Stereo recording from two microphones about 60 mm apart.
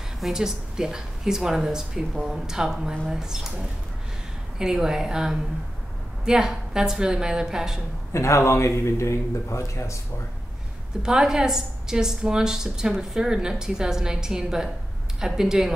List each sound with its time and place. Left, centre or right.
0.2 s a woman's voice: centre
8.1 s speech: left
11.0 s a woman's voice: centre